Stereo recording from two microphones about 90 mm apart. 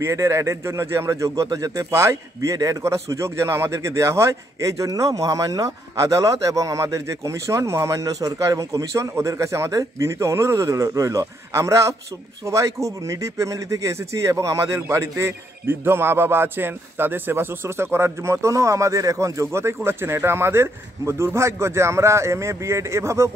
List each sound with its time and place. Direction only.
0.0 s a man's voice: 30° right (ahead or behind)